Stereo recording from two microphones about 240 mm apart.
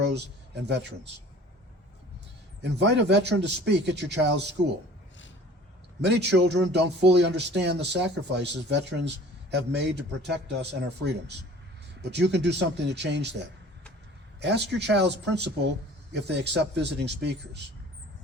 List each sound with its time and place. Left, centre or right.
0.0 s speech: right
2.6 s speech: right
6.0 s speech: right
14.4 s speech: right